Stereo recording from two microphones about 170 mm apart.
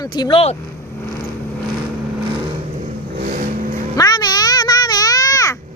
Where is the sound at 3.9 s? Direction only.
25° left (ahead or behind).